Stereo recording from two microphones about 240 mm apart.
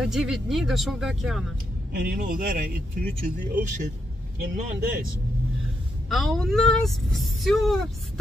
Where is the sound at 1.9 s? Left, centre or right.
Right.